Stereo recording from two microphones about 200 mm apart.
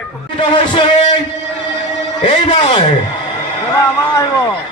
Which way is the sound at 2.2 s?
25° left (ahead or behind).